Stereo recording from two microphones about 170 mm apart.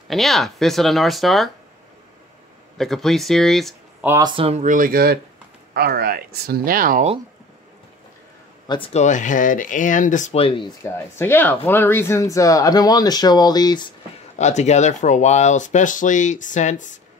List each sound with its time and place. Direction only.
0.1 s speech: centre (ahead or behind)
2.8 s speech: centre (ahead or behind)
4.2 s speech: 30° right (ahead or behind); by 7.1 s 55° right (ahead or behind)
8.6 s speech: 30° left (ahead or behind)
9.0 s speech: 45° left (ahead or behind)
10.4 s speech: 30° left (ahead or behind)
10.8 s speech: 15° left (ahead or behind)
14.4 s speech: 40° left (ahead or behind)